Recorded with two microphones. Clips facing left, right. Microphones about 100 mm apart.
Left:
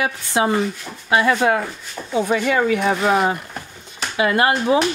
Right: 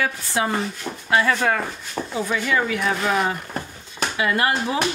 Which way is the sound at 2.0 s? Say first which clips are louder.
Right 5 dB; 45° right (ahead or behind).